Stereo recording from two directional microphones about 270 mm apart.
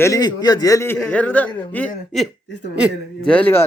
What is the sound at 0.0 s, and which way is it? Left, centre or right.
A man's voice, centre.